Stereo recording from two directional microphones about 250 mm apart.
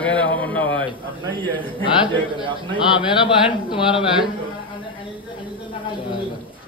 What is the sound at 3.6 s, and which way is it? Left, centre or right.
Speech, centre.